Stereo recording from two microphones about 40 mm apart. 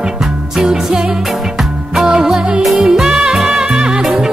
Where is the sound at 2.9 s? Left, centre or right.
Centre.